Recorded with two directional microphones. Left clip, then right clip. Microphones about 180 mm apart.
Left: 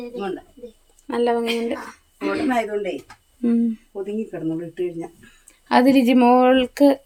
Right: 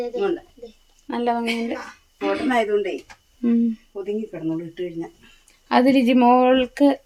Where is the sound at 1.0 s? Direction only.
15° left (ahead or behind).